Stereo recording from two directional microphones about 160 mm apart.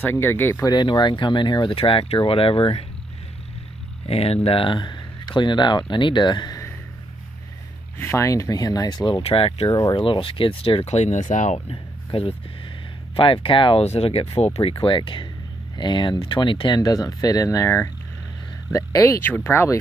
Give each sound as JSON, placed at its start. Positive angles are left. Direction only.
{"t": 0.0, "sound": "speech", "side_deg": 15}
{"t": 0.7, "sound": "speech", "side_deg": 25}
{"t": 4.1, "sound": "speech", "side_deg": 40}
{"t": 8.0, "sound": "speech", "side_deg": 15}
{"t": 9.2, "sound": "speech", "side_deg": 35}
{"t": 9.7, "sound": "speech", "side_deg": 20}
{"t": 9.9, "sound": "speech", "side_deg": 35}
{"t": 11.7, "sound": "a sound", "side_deg": 35}
{"t": 13.1, "sound": "speech", "side_deg": 35}